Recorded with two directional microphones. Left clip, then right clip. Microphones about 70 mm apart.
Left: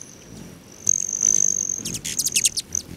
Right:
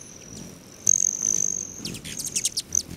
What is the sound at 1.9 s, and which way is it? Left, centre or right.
Insect, left.